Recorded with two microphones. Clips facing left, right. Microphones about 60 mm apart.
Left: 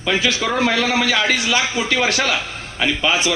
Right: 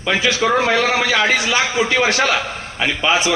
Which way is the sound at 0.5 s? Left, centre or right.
Right.